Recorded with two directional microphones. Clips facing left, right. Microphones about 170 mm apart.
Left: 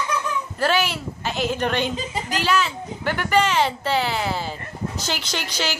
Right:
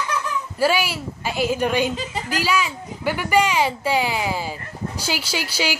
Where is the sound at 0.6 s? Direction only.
10° right (ahead or behind).